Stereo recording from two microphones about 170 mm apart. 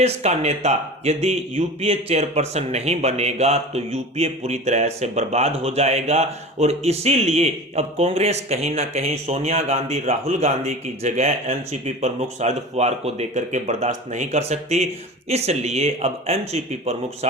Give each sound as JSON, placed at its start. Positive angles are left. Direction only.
{"t": 0.0, "sound": "speech", "side_deg": -40}